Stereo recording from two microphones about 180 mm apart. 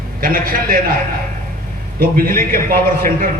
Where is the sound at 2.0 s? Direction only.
55° right (ahead or behind).